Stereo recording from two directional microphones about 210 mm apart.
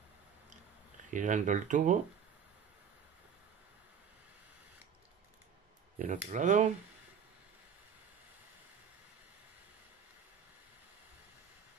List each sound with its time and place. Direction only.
1.1 s speech: 35° right (ahead or behind)
5.9 s speech: 35° right (ahead or behind)